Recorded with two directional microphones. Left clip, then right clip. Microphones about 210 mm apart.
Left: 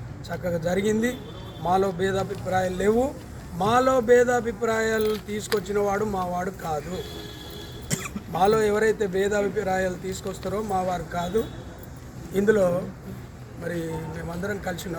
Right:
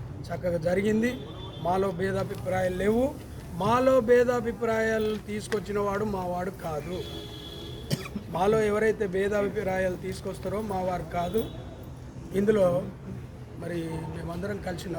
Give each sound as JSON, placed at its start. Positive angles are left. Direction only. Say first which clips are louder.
{"t": 0.3, "sound": "speech", "louder": "left 1 dB", "side_deg": -5}
{"t": 7.9, "sound": "cough", "louder": "left 4 dB", "side_deg": -15}
{"t": 8.4, "sound": "speech", "louder": "left 4 dB", "side_deg": 0}
{"t": 14.4, "sound": "speech", "louder": "left 5 dB", "side_deg": 0}